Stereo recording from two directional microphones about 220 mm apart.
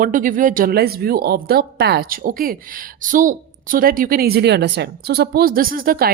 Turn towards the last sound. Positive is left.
turn(degrees=-40)  # may be behind; listen again after turning